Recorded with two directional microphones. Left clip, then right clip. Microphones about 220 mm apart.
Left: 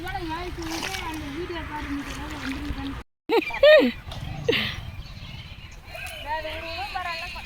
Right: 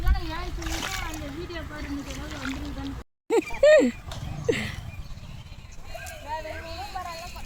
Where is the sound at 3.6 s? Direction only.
Centre (ahead or behind).